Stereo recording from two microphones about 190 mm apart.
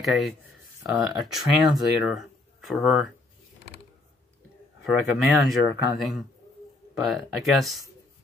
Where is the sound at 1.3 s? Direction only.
Centre (ahead or behind).